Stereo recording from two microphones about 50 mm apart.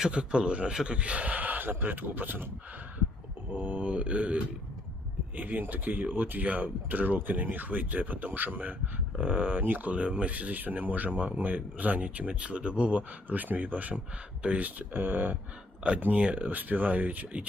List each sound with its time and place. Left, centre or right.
0.1 s speech: right
0.7 s a man's voice: centre
0.9 s speech: right
3.5 s speech: right
5.4 s speech: right
14.9 s speech: right